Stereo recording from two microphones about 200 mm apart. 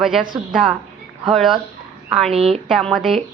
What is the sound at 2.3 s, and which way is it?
Speech, 30° right (ahead or behind).